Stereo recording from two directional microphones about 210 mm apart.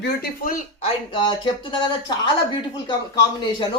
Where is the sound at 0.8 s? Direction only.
25° left (ahead or behind).